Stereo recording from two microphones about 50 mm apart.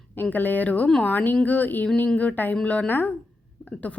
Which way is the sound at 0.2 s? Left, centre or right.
Left.